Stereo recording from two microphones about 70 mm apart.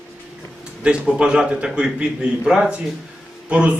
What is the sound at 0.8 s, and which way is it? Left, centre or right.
A man's voice, centre.